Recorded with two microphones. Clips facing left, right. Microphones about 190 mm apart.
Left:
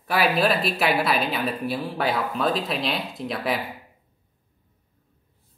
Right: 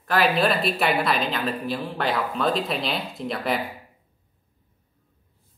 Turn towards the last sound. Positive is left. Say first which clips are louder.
# right 1 dB
turn(degrees=0)  # may be behind; listen again after turning